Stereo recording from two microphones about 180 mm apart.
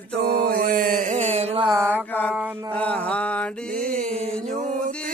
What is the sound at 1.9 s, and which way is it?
Mantra, 10° left (ahead or behind).